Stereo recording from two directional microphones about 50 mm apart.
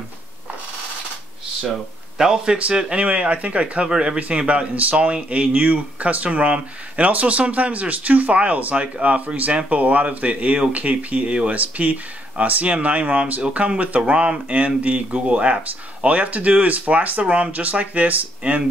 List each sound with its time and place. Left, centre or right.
2.1 s speech: centre; by 3.9 s right
3.9 s speech: centre; by 18.6 s right